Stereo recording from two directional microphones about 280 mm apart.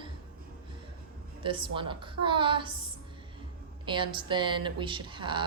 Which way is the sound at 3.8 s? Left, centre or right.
Centre.